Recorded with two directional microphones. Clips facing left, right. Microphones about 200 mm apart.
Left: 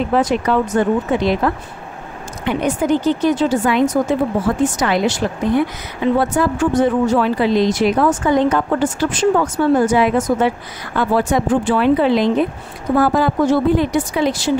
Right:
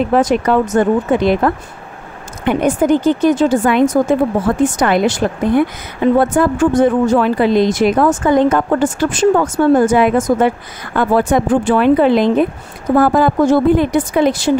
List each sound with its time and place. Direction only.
0.1 s a woman's voice: 50° right (ahead or behind)